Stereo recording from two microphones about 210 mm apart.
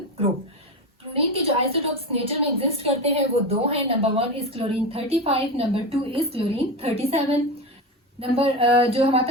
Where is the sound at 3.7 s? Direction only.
25° right (ahead or behind).